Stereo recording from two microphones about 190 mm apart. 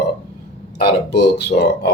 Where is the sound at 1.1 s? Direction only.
60° left (ahead or behind).